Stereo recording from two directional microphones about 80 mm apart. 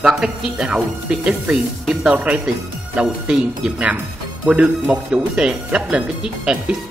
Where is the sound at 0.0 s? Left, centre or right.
Centre.